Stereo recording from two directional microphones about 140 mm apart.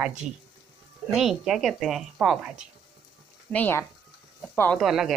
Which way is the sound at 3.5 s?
15° left (ahead or behind).